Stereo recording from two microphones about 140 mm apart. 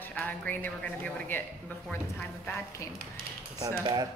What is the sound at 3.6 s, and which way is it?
Speech, 25° right (ahead or behind).